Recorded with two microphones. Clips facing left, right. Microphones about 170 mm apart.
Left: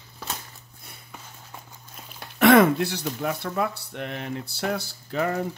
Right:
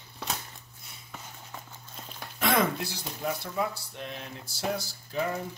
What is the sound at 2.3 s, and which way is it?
Speech, 65° left (ahead or behind).